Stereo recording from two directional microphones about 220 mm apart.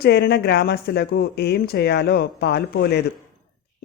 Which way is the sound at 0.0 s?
50° left (ahead or behind).